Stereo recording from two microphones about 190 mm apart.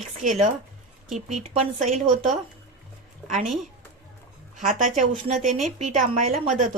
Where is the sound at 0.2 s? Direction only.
40° right (ahead or behind).